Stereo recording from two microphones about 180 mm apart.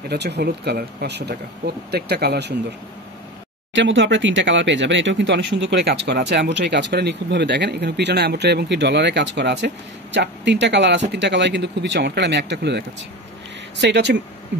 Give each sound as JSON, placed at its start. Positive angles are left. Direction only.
{"t": 0.1, "sound": "speech", "side_deg": -65}
{"t": 3.7, "sound": "speech", "side_deg": -90}